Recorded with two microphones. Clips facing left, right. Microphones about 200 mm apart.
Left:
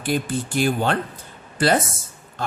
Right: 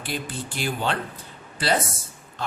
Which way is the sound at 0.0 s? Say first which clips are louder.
Left 8 dB; 50° left (ahead or behind).